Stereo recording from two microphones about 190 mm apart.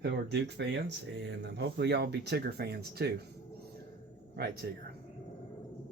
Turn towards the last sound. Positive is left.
turn(degrees=-55)  # may be behind; listen again after turning